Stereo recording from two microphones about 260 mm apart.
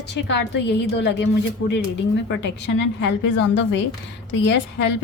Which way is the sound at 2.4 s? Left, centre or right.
Left.